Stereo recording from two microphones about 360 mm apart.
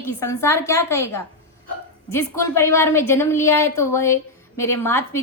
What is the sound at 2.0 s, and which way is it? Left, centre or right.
Speech, left.